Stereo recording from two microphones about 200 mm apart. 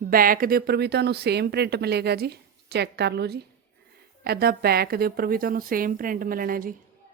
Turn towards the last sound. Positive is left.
turn(degrees=-45)  # may be behind; listen again after turning